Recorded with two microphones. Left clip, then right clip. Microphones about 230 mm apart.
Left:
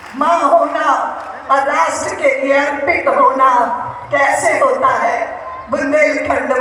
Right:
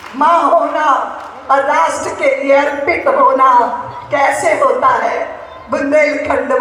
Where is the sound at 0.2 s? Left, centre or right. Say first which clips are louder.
Right 1 dB; right.